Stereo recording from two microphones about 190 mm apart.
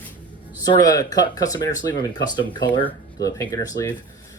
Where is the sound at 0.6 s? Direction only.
20° left (ahead or behind).